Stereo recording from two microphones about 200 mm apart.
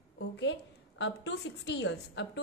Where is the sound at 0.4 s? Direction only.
60° left (ahead or behind).